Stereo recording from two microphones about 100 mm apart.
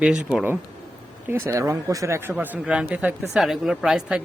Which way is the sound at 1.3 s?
25° right (ahead or behind).